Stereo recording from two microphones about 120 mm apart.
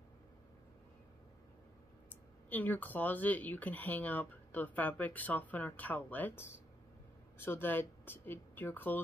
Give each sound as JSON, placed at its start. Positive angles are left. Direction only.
{"t": 2.5, "sound": "speech", "side_deg": 15}